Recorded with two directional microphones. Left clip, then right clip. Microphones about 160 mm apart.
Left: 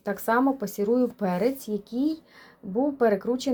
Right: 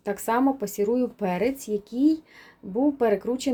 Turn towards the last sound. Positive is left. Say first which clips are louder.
# even
turn(degrees=-20)  # may be behind; listen again after turning